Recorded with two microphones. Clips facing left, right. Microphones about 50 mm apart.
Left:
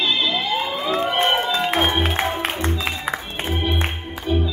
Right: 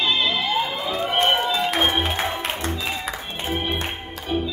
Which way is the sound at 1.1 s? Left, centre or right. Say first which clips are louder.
Right 1 dB; centre.